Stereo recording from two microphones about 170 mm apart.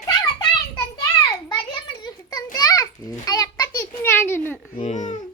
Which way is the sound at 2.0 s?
20° left (ahead or behind).